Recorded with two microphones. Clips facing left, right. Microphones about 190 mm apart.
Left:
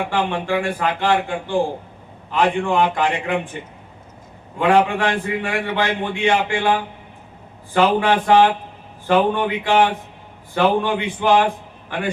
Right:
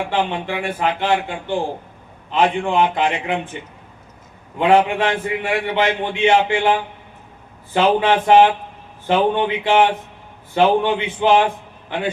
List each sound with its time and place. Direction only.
0.1 s a man's voice: 20° right (ahead or behind)
4.5 s a man's voice: 20° right (ahead or behind)